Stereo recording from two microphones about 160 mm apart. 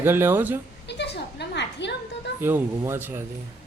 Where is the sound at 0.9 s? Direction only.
90° left.